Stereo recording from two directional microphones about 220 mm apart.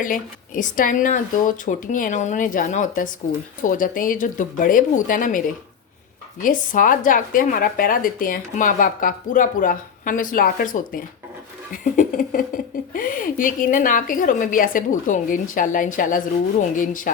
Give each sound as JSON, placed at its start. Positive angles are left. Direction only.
{"t": 0.0, "sound": "a woman's voice", "side_deg": 35}
{"t": 6.4, "sound": "a woman's voice", "side_deg": 35}